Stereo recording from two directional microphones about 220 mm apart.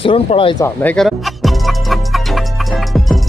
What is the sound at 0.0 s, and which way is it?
Speech, 25° left (ahead or behind).